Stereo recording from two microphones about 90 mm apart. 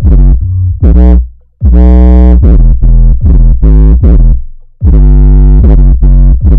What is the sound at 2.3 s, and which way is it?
Synthesizer, 15° left (ahead or behind).